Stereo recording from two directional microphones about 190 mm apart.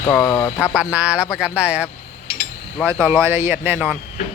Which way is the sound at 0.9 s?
5° right (ahead or behind).